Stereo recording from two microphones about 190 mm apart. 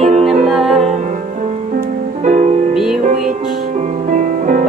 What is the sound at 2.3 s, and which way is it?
Music, 40° right (ahead or behind).